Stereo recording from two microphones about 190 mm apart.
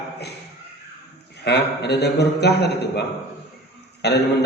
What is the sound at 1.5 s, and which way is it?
A man's voice, 60° left (ahead or behind).